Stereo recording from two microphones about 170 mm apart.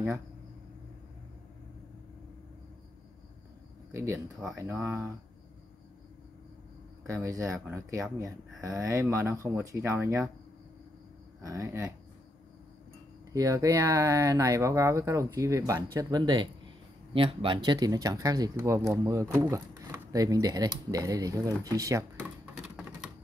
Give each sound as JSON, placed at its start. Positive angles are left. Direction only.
{"t": 3.9, "sound": "speech", "side_deg": -15}
{"t": 7.1, "sound": "speech", "side_deg": -15}
{"t": 11.4, "sound": "speech", "side_deg": -20}
{"t": 13.3, "sound": "speech", "side_deg": -20}
{"t": 22.1, "sound": "a sound", "side_deg": 0}